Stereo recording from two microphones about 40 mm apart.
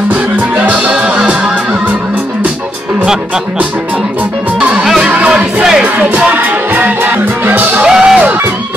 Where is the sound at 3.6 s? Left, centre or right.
Right.